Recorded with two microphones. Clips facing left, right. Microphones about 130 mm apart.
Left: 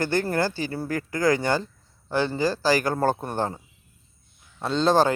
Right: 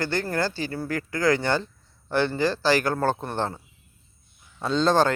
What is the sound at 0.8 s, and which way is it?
Speech, 45° left (ahead or behind).